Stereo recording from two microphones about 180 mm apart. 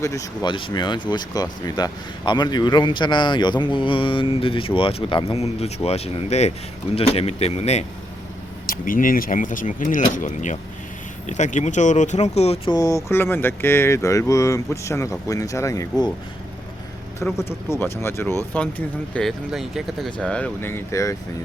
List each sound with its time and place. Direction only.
0.0 s speech: 20° left (ahead or behind); by 7.9 s 35° left (ahead or behind)
8.6 s speech: 50° left (ahead or behind)
12.7 s speech: 20° left (ahead or behind)
17.2 s speech: 15° left (ahead or behind)
19.1 s speech: centre (ahead or behind); by 21.2 s 15° left (ahead or behind)